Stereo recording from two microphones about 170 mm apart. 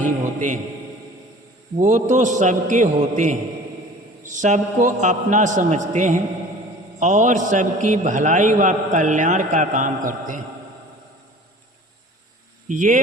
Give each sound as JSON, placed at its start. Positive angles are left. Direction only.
{"t": 0.3, "sound": "a man's voice", "side_deg": -50}
{"t": 1.8, "sound": "a man's voice", "side_deg": -45}
{"t": 12.6, "sound": "speech", "side_deg": -50}